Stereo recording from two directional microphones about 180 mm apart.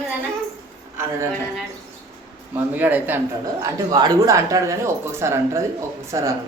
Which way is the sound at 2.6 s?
10° right (ahead or behind).